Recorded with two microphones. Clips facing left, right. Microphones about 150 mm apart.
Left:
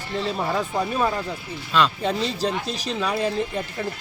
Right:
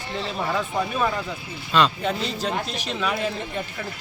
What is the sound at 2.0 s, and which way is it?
Speech, 35° left (ahead or behind).